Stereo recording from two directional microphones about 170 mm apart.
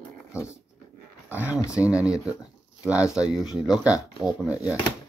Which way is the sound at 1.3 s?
10° right (ahead or behind).